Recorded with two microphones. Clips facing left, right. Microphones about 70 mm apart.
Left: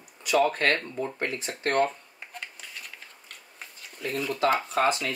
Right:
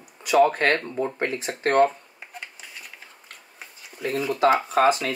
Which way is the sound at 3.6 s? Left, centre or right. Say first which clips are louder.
Right 2 dB; centre.